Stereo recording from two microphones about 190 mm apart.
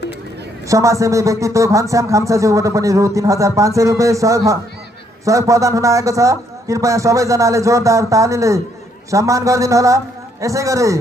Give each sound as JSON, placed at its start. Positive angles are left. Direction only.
{"t": 0.7, "sound": "a man's voice", "side_deg": -15}